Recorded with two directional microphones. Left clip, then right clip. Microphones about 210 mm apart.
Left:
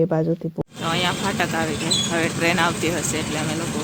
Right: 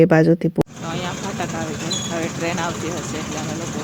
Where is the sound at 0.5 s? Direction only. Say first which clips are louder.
Even; 5° left (ahead or behind).